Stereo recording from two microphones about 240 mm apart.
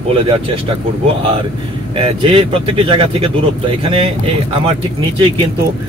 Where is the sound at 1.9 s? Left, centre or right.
Right.